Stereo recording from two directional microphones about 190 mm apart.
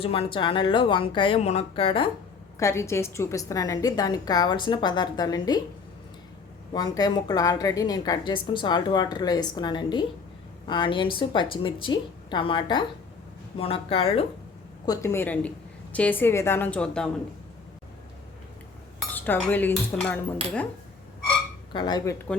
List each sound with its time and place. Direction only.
0.0 s a woman's voice: 30° left (ahead or behind)
2.6 s a woman's voice: 15° left (ahead or behind)
6.7 s a woman's voice: 20° left (ahead or behind)
14.8 s a woman's voice: 15° left (ahead or behind)
19.1 s a woman's voice: 10° left (ahead or behind)
21.7 s a woman's voice: 25° left (ahead or behind)